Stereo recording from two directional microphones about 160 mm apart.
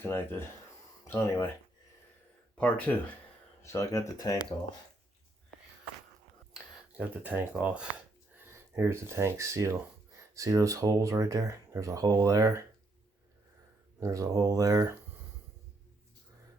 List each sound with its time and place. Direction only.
0.0 s speech: 10° left (ahead or behind)
2.6 s speech: 10° left (ahead or behind)
6.5 s speech: 10° right (ahead or behind)
14.0 s speech: 20° right (ahead or behind)